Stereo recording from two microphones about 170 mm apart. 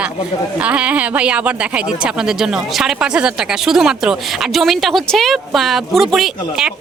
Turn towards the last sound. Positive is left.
turn(degrees=0)  # may be behind; listen again after turning